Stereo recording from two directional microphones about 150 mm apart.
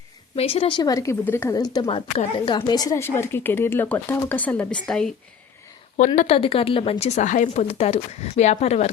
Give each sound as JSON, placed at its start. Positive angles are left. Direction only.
{"t": 0.3, "sound": "a woman's voice", "side_deg": 40}
{"t": 1.5, "sound": "speech", "side_deg": 25}
{"t": 1.9, "sound": "speech", "side_deg": 35}
{"t": 6.1, "sound": "a woman's voice", "side_deg": 40}